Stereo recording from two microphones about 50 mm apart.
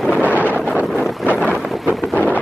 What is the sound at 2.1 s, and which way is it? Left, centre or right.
Wind noise, left.